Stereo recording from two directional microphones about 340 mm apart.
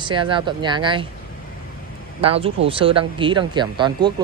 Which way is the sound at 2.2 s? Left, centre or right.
Centre.